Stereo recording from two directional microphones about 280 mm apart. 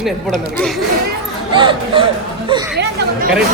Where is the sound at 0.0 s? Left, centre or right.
Centre.